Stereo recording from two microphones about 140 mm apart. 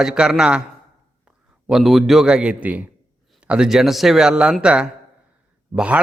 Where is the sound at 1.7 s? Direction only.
Centre (ahead or behind).